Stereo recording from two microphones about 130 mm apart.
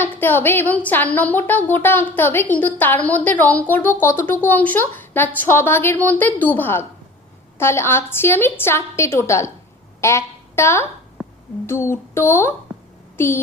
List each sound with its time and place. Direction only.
0.0 s a woman's voice: 15° left (ahead or behind)
11.2 s a sound: 5° right (ahead or behind)
11.6 s a woman's voice: 20° left (ahead or behind)